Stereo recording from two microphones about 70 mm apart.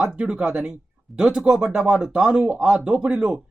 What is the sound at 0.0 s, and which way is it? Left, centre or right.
Speech, centre.